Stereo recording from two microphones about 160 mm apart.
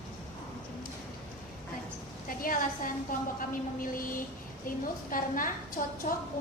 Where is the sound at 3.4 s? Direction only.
60° left (ahead or behind).